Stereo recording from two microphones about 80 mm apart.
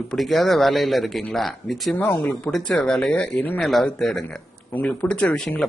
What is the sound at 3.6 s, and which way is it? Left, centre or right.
Speech, centre.